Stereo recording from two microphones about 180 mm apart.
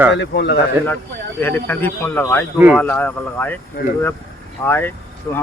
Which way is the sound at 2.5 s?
5° right (ahead or behind).